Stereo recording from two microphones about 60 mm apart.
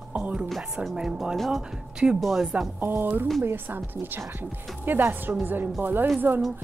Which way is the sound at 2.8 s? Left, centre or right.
Right.